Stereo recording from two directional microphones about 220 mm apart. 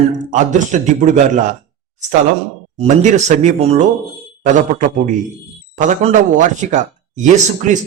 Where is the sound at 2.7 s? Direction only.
30° right (ahead or behind).